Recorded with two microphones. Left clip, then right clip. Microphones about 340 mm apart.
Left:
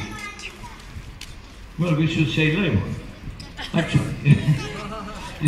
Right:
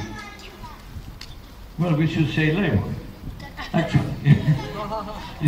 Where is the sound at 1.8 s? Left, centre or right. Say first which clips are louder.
Left 1 dB; centre.